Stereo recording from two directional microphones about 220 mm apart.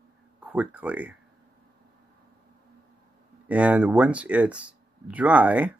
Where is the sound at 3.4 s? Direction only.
5° right (ahead or behind).